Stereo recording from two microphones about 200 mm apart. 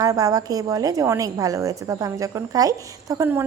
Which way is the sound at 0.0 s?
15° right (ahead or behind).